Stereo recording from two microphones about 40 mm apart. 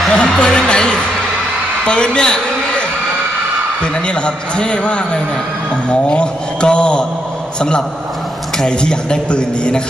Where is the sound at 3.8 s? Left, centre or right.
Left.